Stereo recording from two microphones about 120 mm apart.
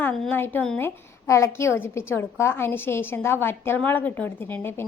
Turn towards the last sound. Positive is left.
turn(degrees=20)  # may be behind; listen again after turning